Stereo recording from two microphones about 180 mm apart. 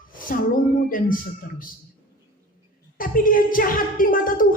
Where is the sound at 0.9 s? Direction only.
50° left (ahead or behind).